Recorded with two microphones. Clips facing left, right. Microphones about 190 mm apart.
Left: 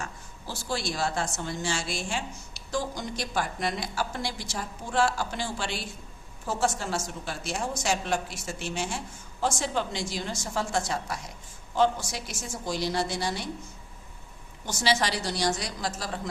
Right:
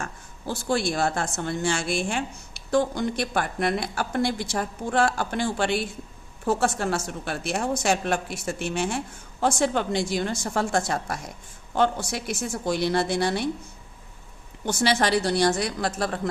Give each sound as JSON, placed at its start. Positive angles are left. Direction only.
{"t": 0.0, "sound": "a woman's voice", "side_deg": -55}
{"t": 14.6, "sound": "a woman's voice", "side_deg": -55}